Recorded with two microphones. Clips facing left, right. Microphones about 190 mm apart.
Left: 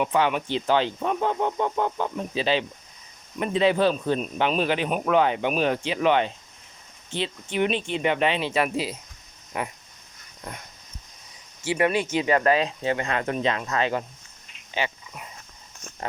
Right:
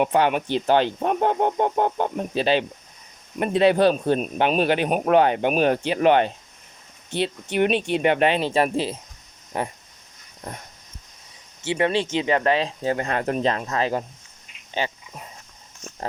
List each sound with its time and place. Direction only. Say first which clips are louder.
0.0 s speech: right 3 dB; 55° right (ahead or behind)
7.5 s speech: right 4 dB; 65° right (ahead or behind)
8.4 s speech: right 3 dB; 35° right (ahead or behind)
11.6 s speech: right 1 dB; 25° right (ahead or behind)
12.8 s speech: right 2 dB; 40° right (ahead or behind)
14.7 s dog: right 2 dB; 35° right (ahead or behind)